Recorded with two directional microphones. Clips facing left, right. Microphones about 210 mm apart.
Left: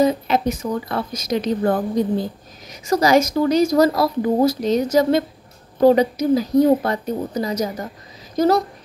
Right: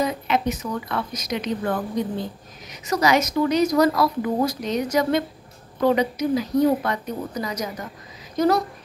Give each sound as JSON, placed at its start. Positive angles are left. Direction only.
{"t": 0.0, "sound": "speech", "side_deg": 30}